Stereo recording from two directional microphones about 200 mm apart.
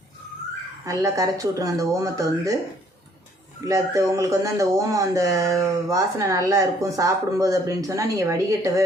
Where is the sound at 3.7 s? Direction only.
15° right (ahead or behind).